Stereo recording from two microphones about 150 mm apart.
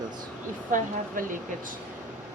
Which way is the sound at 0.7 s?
65° right (ahead or behind).